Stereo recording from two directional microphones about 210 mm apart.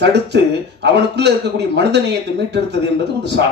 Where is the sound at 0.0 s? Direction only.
55° right (ahead or behind).